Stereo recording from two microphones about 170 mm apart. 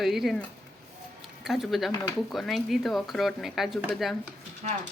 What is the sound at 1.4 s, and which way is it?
Speech, centre (ahead or behind).